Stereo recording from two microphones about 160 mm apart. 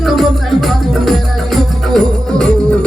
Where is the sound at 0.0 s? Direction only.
Centre (ahead or behind).